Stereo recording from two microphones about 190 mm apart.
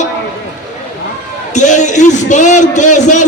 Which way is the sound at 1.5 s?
40° left (ahead or behind).